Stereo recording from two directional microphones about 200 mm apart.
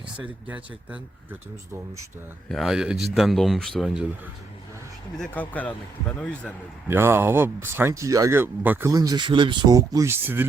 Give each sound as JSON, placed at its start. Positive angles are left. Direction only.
{"t": 0.2, "sound": "speech", "side_deg": -5}
{"t": 2.5, "sound": "speech", "side_deg": 0}
{"t": 5.1, "sound": "speech", "side_deg": 5}
{"t": 6.8, "sound": "speech", "side_deg": -10}